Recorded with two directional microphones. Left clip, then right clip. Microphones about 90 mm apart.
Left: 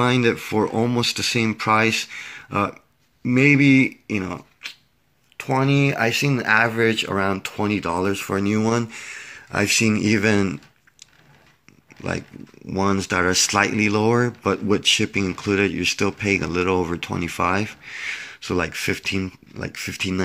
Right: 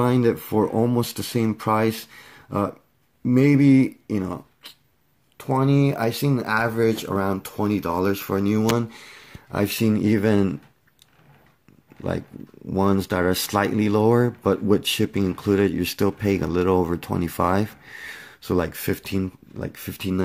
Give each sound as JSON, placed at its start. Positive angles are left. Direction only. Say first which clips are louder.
{"t": 0.0, "sound": "speech", "louder": "left 1 dB", "side_deg": -25}
{"t": 12.0, "sound": "speech", "louder": "even", "side_deg": -30}